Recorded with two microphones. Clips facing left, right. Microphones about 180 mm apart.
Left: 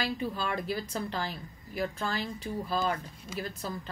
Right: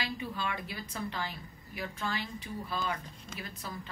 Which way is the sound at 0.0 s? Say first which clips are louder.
Left 4 dB; 35° left (ahead or behind).